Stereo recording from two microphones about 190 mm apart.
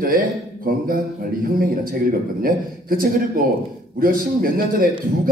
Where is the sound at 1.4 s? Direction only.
50° right (ahead or behind).